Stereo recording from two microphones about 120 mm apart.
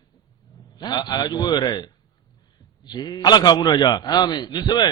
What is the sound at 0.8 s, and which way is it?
A man's voice, 35° left (ahead or behind).